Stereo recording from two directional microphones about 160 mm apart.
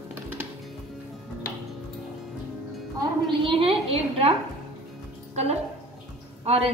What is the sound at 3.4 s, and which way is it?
Speech, 35° right (ahead or behind).